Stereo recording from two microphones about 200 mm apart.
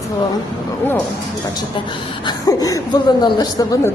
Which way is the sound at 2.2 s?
20° left (ahead or behind).